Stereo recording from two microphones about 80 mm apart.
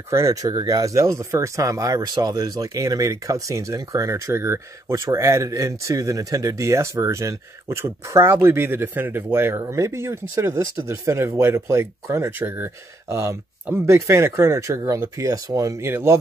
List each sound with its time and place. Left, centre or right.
0.1 s speech: right
15.9 s speech: right